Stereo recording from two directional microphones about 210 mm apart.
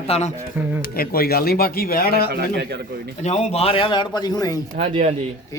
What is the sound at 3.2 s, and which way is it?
A man's voice, 30° left (ahead or behind).